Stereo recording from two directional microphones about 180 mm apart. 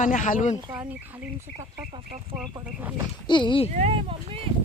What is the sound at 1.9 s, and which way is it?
Speech, 30° right (ahead or behind).